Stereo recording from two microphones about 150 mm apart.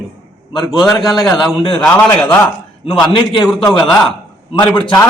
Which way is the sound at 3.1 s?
30° left (ahead or behind).